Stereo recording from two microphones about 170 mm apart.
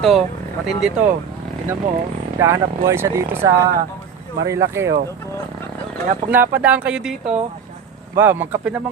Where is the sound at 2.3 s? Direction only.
15° right (ahead or behind).